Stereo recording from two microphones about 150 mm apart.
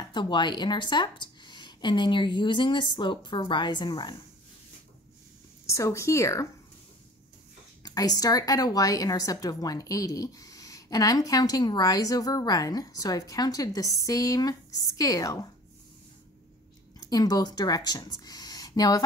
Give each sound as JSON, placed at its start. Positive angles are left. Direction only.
{"t": 0.1, "sound": "a woman's voice", "side_deg": 30}
{"t": 5.7, "sound": "a woman's voice", "side_deg": 20}
{"t": 7.8, "sound": "a woman's voice", "side_deg": 25}
{"t": 17.1, "sound": "speech", "side_deg": 25}